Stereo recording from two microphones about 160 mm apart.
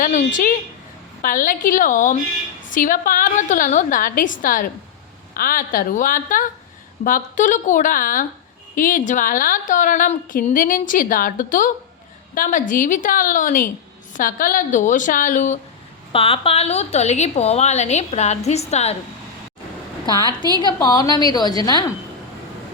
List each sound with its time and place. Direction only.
0.0 s a woman's voice: 55° left (ahead or behind)
16.1 s a woman's voice: 35° left (ahead or behind)
20.1 s a woman's voice: 25° left (ahead or behind)